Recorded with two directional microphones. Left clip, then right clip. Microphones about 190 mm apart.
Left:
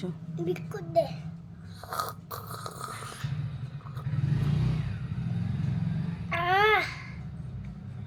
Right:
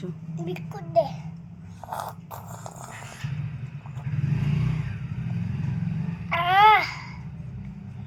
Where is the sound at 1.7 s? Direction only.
25° left (ahead or behind).